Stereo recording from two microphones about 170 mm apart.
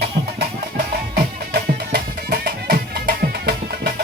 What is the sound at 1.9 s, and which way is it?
Music, 65° right (ahead or behind).